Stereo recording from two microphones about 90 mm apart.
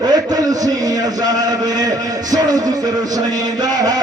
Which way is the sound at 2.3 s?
45° right (ahead or behind).